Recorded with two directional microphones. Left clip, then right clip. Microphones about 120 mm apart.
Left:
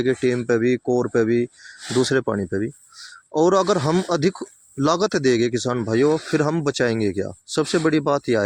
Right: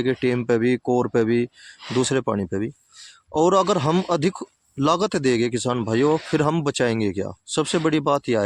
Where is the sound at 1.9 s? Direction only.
5° right (ahead or behind).